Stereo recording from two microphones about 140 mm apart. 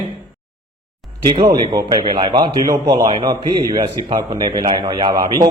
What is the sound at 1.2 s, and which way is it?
A man's voice, 30° right (ahead or behind).